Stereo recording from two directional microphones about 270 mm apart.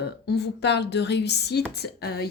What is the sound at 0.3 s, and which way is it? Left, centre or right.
Speech, left.